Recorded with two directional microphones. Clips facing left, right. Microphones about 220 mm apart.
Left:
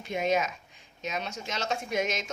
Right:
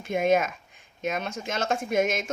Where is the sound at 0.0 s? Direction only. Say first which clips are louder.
Right 5 dB; 50° right (ahead or behind).